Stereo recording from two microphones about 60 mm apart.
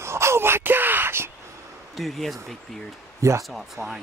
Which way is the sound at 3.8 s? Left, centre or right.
Right.